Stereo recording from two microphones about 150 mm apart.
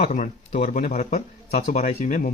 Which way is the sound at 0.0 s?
60° left (ahead or behind).